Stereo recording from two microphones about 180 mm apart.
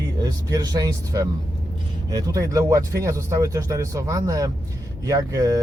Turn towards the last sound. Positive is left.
turn(degrees=-20)  # may be behind; listen again after turning